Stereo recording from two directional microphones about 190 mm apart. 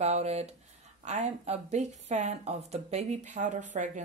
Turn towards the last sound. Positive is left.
turn(degrees=-40)  # may be behind; listen again after turning